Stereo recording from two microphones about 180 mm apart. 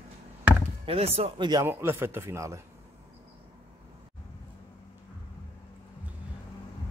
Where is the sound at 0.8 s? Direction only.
35° right (ahead or behind).